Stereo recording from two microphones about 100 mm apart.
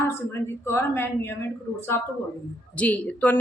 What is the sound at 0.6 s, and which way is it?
Speech, 25° left (ahead or behind).